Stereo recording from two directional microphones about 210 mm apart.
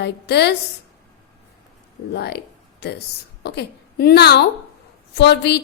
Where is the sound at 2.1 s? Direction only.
50° left (ahead or behind).